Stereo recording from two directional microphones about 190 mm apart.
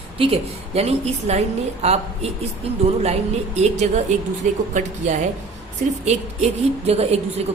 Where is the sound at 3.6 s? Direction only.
35° right (ahead or behind).